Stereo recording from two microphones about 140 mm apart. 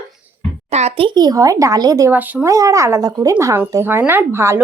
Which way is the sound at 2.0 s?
10° right (ahead or behind).